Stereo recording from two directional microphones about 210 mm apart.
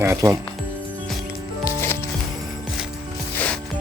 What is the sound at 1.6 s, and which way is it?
Music, 10° left (ahead or behind).